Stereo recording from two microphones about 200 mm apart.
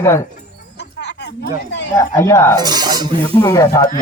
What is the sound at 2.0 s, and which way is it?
Speech, 15° left (ahead or behind).